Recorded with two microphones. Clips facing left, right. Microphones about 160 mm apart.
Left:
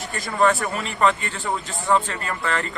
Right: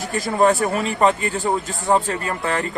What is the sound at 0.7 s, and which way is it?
Speech, 40° right (ahead or behind).